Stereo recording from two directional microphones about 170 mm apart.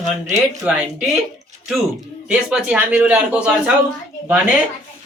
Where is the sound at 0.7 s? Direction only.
5° right (ahead or behind).